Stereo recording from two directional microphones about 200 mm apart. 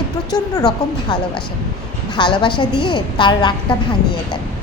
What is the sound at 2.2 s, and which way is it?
A woman's voice, 25° left (ahead or behind).